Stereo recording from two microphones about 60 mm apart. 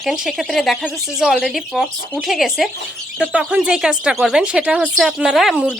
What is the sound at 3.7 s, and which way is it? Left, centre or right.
Speech, centre.